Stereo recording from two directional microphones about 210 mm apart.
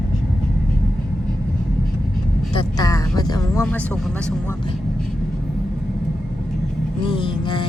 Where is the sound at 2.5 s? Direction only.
15° left (ahead or behind).